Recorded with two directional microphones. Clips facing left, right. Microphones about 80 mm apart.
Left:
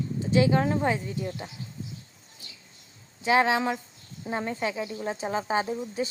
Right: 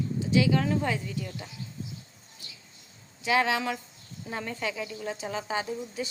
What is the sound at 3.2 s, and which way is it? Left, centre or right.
Speech, left.